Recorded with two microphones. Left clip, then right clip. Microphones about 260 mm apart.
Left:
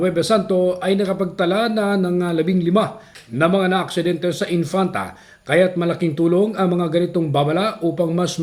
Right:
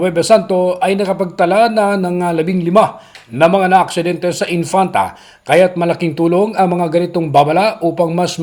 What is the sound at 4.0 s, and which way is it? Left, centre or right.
Speech, centre.